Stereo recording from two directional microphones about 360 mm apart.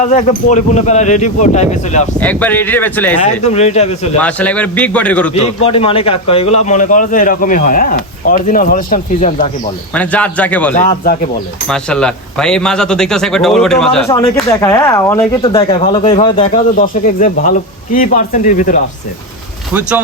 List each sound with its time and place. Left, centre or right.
0.0 s a man's voice: centre
2.2 s speech: centre
3.2 s speech: centre
4.2 s speech: centre
5.3 s a man's voice: centre
9.9 s a man's voice: centre; by 18.8 s left